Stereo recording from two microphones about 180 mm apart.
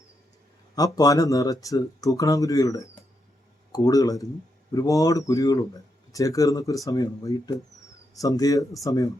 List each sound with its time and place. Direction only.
0.9 s speech: 20° left (ahead or behind)